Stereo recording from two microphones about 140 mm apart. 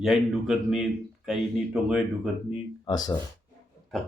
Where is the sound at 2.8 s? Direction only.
30° left (ahead or behind).